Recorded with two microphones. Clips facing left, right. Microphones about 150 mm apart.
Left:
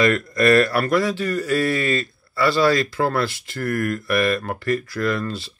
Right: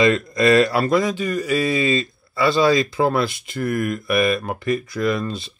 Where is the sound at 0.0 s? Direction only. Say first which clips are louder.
Right 1 dB; 20° right (ahead or behind).